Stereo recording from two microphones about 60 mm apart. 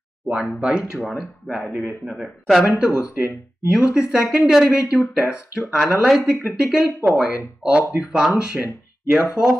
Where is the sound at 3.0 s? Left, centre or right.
Left.